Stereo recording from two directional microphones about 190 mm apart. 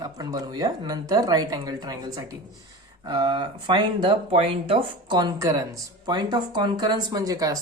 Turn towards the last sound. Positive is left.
turn(degrees=-20)  # may be behind; listen again after turning